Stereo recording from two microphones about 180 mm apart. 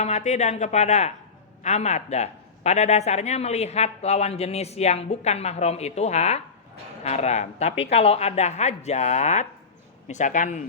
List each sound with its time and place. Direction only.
0.0 s speech: 40° left (ahead or behind)